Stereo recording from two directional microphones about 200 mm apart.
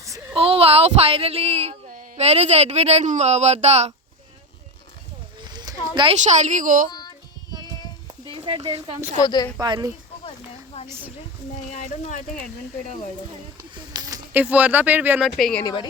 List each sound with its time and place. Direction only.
0.3 s child singing: 30° right (ahead or behind)
2.1 s speech: 30° right (ahead or behind)
5.4 s a sound: 20° right (ahead or behind)
5.9 s speech: 25° right (ahead or behind)
6.1 s speech: 35° right (ahead or behind)
8.3 s speech: 25° right (ahead or behind)
9.1 s a woman's voice: 20° left (ahead or behind)
9.6 s speech: 20° right (ahead or behind)
11.7 s speech: 40° left (ahead or behind)
13.9 s speech: 20° right (ahead or behind); by 15.6 s centre (ahead or behind)
15.6 s a woman's voice: 20° left (ahead or behind)